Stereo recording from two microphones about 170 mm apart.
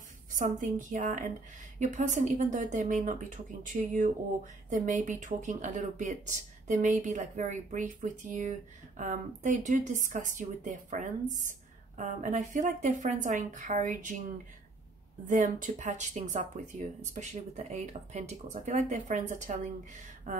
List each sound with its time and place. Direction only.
0.3 s speech: 50° right (ahead or behind)
15.2 s speech: 50° right (ahead or behind)